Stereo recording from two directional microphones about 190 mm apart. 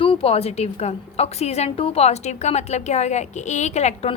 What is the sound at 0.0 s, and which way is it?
A woman's voice, 30° left (ahead or behind).